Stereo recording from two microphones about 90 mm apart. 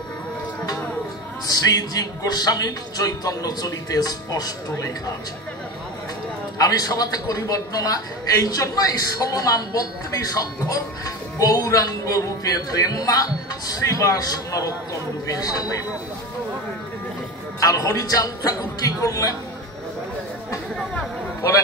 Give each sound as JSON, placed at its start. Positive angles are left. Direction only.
{"t": 1.4, "sound": "speech", "side_deg": 45}
{"t": 6.6, "sound": "a man's voice", "side_deg": 45}
{"t": 17.6, "sound": "a man's voice", "side_deg": 40}
{"t": 20.7, "sound": "chatter", "side_deg": 5}